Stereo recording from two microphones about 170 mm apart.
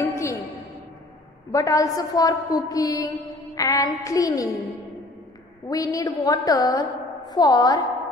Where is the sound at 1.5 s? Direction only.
20° left (ahead or behind).